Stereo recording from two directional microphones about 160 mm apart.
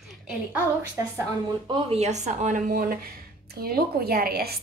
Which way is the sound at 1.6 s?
30° right (ahead or behind).